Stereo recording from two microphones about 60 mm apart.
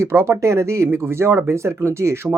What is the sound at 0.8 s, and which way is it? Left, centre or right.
Speech, right.